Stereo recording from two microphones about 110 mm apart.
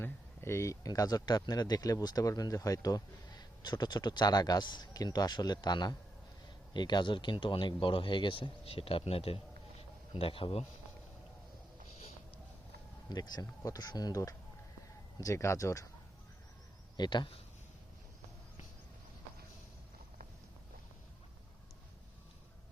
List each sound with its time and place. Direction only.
0.0 s a man's voice: 25° left (ahead or behind); by 10.7 s 60° left (ahead or behind)
13.1 s speech: 40° left (ahead or behind)
17.0 s speech: 45° left (ahead or behind)